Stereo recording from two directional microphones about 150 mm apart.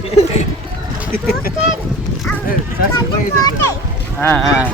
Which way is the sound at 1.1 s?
80° left.